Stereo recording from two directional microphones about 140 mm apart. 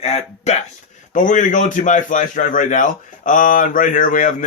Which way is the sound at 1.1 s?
65° left (ahead or behind).